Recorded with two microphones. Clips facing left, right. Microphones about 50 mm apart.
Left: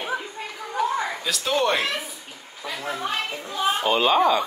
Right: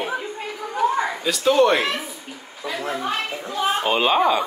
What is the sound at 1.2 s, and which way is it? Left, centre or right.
Speech, centre.